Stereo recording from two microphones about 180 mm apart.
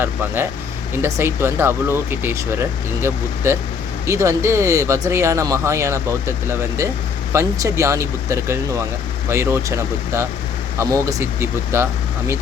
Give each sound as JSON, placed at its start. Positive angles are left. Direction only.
{"t": 1.0, "sound": "speech", "side_deg": -15}